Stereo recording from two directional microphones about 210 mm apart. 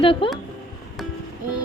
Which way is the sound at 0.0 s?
25° left (ahead or behind).